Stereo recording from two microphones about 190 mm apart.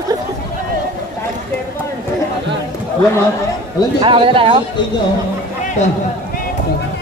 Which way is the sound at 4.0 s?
30° right (ahead or behind).